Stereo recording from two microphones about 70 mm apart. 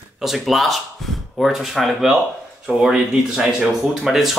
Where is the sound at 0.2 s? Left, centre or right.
Centre.